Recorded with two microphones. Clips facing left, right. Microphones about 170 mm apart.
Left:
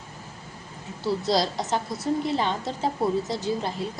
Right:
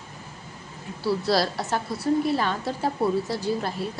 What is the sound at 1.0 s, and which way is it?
A woman's voice, 20° left (ahead or behind).